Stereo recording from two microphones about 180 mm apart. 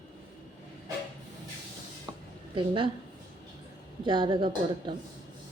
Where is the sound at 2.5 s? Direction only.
30° right (ahead or behind).